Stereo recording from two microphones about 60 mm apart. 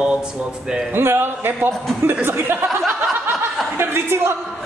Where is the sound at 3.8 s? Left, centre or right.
Right.